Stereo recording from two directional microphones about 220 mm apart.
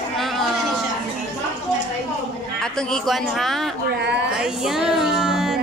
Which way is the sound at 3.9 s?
50° right (ahead or behind).